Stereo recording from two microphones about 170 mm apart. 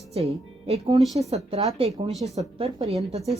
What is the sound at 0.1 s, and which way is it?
A woman's voice, 40° right (ahead or behind).